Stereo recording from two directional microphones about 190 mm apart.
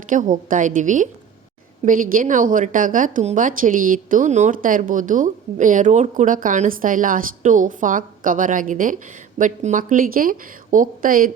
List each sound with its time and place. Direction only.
0.1 s a woman's voice: 40° right (ahead or behind)